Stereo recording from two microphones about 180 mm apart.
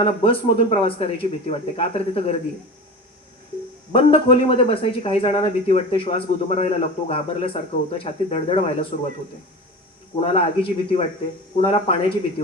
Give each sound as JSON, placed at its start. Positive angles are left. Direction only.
{"t": 0.0, "sound": "speech", "side_deg": 30}
{"t": 3.9, "sound": "speech", "side_deg": 30}
{"t": 10.3, "sound": "speech", "side_deg": 30}